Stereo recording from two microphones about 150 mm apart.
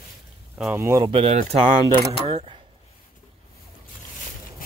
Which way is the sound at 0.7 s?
20° right (ahead or behind).